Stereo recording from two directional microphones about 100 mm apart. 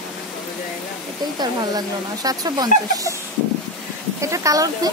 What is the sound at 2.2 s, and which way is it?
Speech, 40° right (ahead or behind).